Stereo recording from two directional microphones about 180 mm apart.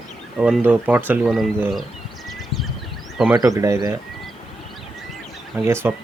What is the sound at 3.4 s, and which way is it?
Speech, 20° right (ahead or behind).